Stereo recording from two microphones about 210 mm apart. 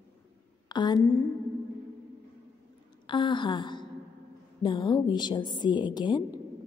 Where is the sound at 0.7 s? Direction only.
20° left (ahead or behind).